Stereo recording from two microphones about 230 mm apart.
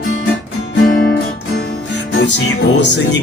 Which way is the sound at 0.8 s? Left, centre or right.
Left.